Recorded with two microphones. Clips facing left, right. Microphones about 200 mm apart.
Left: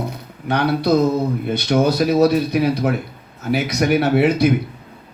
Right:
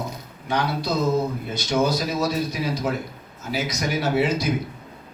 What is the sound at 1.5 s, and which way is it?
A man's voice, 60° left (ahead or behind).